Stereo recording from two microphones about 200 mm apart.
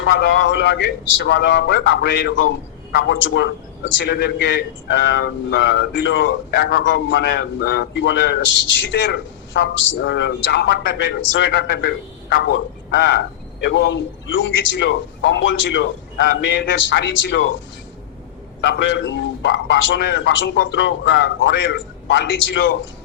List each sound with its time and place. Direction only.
0.0 s speech: 65° left (ahead or behind)
9.6 s speech: 60° left (ahead or behind)
18.6 s speech: 60° left (ahead or behind)